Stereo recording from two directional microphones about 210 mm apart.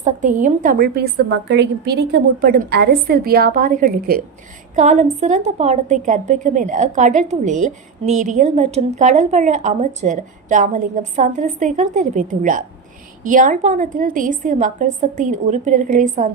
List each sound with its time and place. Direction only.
0.0 s a woman's voice: 35° right (ahead or behind)